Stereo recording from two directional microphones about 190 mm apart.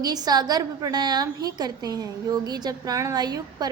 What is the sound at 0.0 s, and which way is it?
A woman's voice, 20° right (ahead or behind).